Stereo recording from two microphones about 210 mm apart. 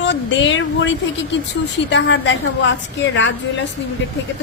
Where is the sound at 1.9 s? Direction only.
55° left (ahead or behind).